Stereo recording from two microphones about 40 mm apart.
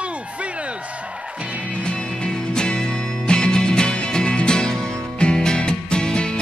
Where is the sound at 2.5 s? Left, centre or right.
Left.